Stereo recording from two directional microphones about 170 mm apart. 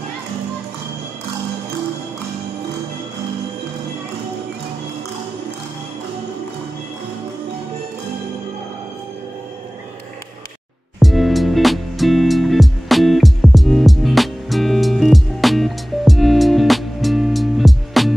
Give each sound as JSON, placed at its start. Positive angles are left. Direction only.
{"t": 11.0, "sound": "music", "side_deg": 0}